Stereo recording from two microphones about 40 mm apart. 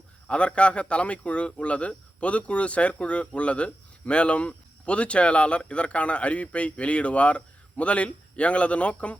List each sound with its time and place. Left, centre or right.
0.3 s a man's voice: left